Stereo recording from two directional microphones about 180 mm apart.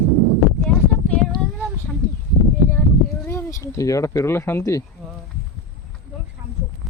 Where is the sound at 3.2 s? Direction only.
15° left (ahead or behind).